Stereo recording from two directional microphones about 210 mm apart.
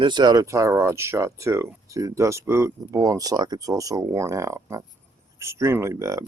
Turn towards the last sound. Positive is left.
turn(degrees=-15)  # may be behind; listen again after turning